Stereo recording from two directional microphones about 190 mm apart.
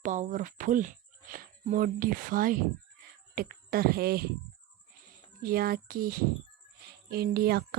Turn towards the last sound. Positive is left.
turn(degrees=-55)  # may be behind; listen again after turning